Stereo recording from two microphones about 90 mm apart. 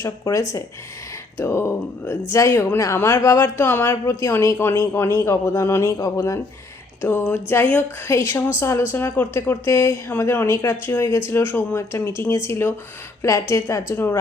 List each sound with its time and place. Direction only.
0.0 s a woman's voice: 35° left (ahead or behind)
7.0 s a woman's voice: 25° left (ahead or behind)